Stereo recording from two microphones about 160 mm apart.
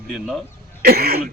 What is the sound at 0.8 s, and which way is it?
Cough, 75° right (ahead or behind).